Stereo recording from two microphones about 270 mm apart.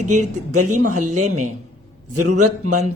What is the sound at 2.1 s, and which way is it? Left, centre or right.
Speech, right.